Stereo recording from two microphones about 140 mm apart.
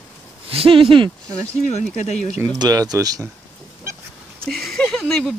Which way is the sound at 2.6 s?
25° right (ahead or behind).